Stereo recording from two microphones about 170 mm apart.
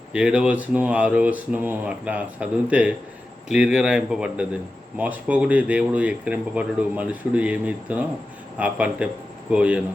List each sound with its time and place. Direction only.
0.1 s a man's voice: 5° right (ahead or behind)